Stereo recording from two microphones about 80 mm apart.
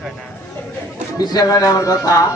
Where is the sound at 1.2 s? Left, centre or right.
Left.